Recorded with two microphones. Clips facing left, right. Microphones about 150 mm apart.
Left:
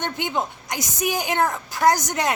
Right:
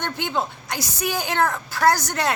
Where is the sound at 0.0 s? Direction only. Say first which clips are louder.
Even; 15° left (ahead or behind).